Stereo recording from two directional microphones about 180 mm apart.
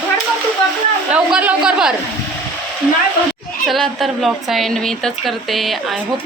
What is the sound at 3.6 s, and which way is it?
A woman's voice, centre (ahead or behind).